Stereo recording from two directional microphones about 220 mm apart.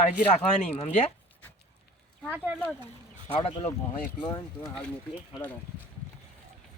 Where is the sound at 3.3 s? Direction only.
25° left (ahead or behind).